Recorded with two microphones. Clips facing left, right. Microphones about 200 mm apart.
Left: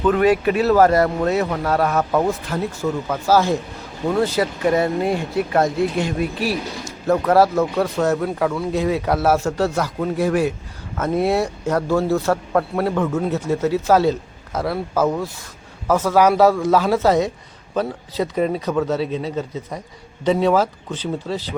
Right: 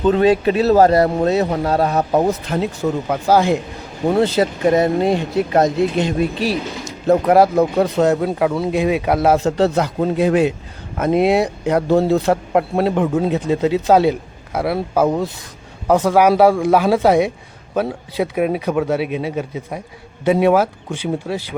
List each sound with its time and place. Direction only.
0.0 s speech: 25° right (ahead or behind)
2.2 s a man's voice: 20° right (ahead or behind)